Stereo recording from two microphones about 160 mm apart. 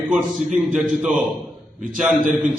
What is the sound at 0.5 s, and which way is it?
Speech, 5° right (ahead or behind).